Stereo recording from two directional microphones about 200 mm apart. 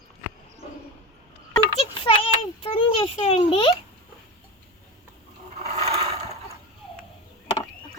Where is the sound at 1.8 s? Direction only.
25° left (ahead or behind).